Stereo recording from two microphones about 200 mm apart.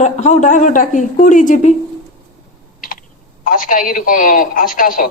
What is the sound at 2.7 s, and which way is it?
Typing, 45° left (ahead or behind).